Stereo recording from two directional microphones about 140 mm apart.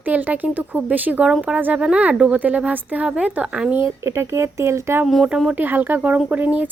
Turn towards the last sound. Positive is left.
turn(degrees=-10)  # may be behind; listen again after turning